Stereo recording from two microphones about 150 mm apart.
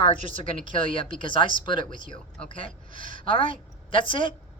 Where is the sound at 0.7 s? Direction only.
35° left (ahead or behind).